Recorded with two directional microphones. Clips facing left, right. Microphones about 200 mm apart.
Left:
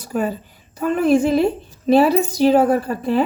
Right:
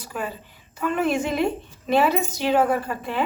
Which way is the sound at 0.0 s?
40° left (ahead or behind).